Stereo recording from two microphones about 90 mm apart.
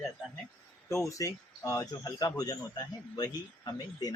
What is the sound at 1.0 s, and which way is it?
Speech, 40° left (ahead or behind).